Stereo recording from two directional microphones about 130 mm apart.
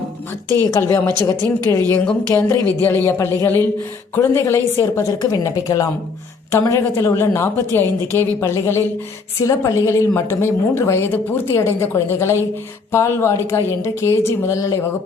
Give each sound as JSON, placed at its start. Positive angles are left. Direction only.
{"t": 0.5, "sound": "a woman's voice", "side_deg": 20}
{"t": 2.3, "sound": "a woman's voice", "side_deg": 15}